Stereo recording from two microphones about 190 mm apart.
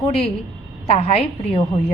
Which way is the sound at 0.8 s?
35° left (ahead or behind).